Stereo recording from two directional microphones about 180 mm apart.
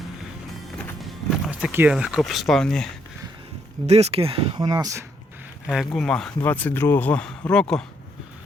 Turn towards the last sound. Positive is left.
turn(degrees=5)  # may be behind; listen again after turning